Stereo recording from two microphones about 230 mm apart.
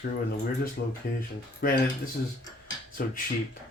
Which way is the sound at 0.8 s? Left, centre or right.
Left.